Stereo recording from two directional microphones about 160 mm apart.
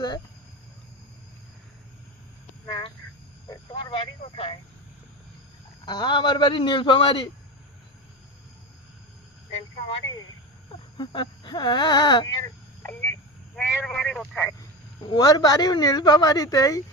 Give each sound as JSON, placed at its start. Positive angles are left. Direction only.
{"t": 2.6, "sound": "a sound", "side_deg": 30}
{"t": 5.8, "sound": "a woman's voice", "side_deg": 25}
{"t": 10.9, "sound": "speech", "side_deg": 30}
{"t": 12.8, "sound": "a sound", "side_deg": 10}
{"t": 13.6, "sound": "speech", "side_deg": 5}
{"t": 15.0, "sound": "a woman's voice", "side_deg": 25}